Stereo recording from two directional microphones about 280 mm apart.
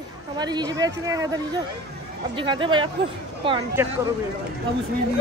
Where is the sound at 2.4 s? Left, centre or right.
Centre.